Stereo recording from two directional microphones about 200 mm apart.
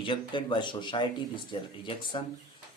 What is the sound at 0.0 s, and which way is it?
A man's voice, 25° left (ahead or behind).